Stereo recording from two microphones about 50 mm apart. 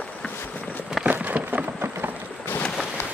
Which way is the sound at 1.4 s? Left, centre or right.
Right.